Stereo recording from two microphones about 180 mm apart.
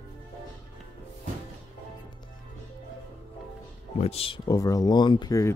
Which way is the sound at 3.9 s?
35° left (ahead or behind).